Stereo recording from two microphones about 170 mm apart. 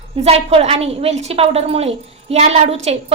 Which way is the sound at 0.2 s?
35° right (ahead or behind).